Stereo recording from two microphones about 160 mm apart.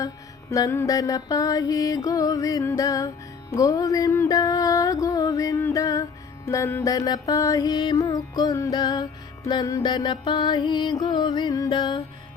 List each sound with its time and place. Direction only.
0.5 s mantra: 20° left (ahead or behind)